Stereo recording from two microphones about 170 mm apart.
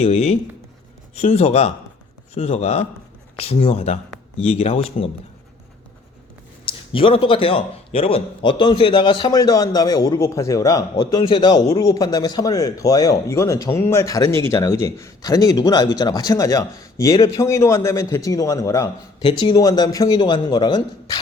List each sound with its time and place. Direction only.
0.0 s speech: 40° left (ahead or behind)
6.7 s a man's voice: 30° left (ahead or behind)